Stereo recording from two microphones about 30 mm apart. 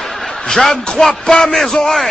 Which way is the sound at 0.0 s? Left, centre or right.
Centre.